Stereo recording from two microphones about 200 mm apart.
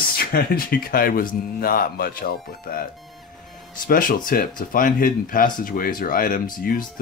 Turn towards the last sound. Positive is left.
turn(degrees=45)  # may be behind; listen again after turning